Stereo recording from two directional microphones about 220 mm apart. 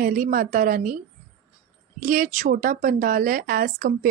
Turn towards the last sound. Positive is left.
turn(degrees=-40)  # may be behind; listen again after turning